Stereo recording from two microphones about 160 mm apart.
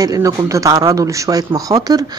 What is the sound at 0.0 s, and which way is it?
Speech, 20° right (ahead or behind).